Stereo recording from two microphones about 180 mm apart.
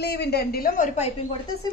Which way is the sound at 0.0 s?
65° left (ahead or behind).